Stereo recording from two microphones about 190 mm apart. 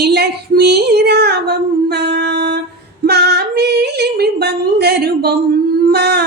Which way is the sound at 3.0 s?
60° right (ahead or behind).